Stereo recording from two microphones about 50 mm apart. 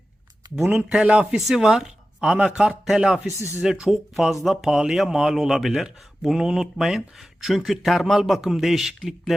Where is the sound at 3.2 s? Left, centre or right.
Left.